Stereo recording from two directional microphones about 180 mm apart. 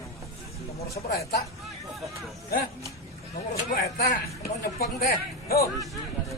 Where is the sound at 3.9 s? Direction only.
60° left (ahead or behind).